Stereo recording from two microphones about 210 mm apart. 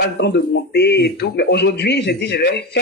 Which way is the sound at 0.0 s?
50° left (ahead or behind).